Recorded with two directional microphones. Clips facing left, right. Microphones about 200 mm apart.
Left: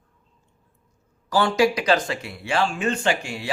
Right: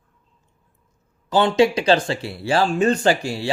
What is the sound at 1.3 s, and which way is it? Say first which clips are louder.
Speech: right 3 dB; 20° right (ahead or behind).